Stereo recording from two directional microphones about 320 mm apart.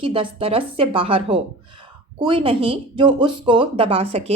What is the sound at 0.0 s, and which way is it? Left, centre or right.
Speech, centre.